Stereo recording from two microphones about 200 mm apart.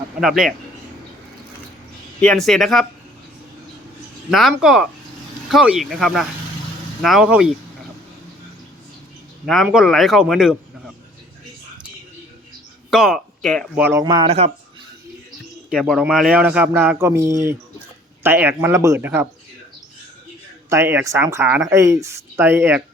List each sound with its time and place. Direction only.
0.2 s a man's voice: centre (ahead or behind)
2.2 s a man's voice: 5° left (ahead or behind)
4.3 s a man's voice: centre (ahead or behind)
9.6 s a man's voice: centre (ahead or behind)
12.9 s speech: centre (ahead or behind)
13.7 s speech: 10° right (ahead or behind)
14.0 s speech: 20° right (ahead or behind)
15.7 s speech: centre (ahead or behind)
20.7 s speech: 10° right (ahead or behind)